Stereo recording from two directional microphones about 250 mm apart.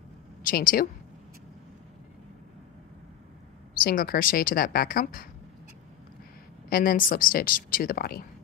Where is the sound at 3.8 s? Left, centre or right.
Left.